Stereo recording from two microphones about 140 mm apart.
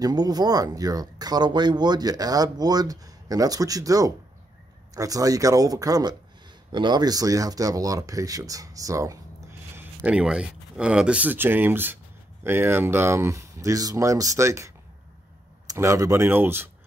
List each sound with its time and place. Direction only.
0.0 s speech: 30° right (ahead or behind)